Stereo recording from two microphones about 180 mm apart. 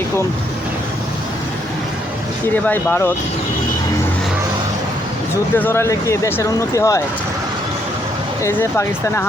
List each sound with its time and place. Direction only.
2.6 s speech: 10° left (ahead or behind)
5.5 s speech: 10° left (ahead or behind)
8.4 s speech: 15° left (ahead or behind)